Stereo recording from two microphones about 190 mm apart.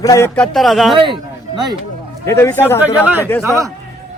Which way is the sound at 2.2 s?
15° left (ahead or behind).